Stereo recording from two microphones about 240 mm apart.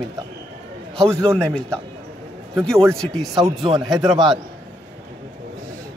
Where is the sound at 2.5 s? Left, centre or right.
Centre.